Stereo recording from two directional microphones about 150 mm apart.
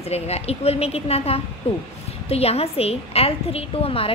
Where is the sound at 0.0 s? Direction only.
45° left (ahead or behind).